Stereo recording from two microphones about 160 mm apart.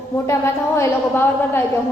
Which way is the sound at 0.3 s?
15° left (ahead or behind).